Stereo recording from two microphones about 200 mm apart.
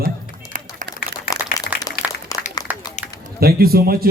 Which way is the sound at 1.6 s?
20° left (ahead or behind).